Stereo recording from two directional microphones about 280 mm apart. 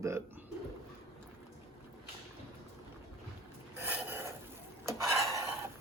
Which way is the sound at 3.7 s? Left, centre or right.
Centre.